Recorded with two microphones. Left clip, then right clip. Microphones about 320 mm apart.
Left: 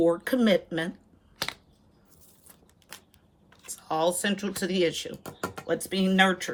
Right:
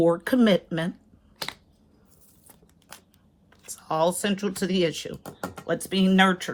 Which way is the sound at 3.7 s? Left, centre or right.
Centre.